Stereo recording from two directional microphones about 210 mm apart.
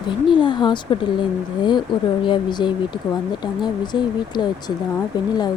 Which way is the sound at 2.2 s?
20° left (ahead or behind).